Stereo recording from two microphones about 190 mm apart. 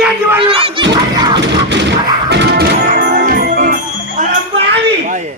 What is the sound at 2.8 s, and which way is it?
Music, 40° right (ahead or behind).